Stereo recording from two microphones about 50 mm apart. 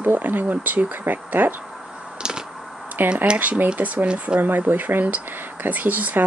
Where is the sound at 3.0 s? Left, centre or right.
Right.